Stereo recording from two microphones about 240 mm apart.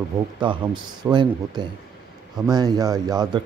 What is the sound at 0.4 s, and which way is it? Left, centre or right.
Speech, right.